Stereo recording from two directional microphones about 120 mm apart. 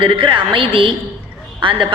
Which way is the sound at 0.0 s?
45° right (ahead or behind).